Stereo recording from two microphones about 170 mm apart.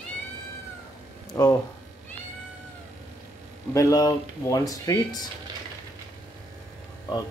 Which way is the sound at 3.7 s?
20° left (ahead or behind).